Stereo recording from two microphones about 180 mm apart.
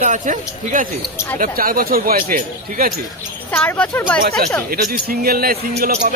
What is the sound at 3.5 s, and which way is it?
Speech, 5° left (ahead or behind).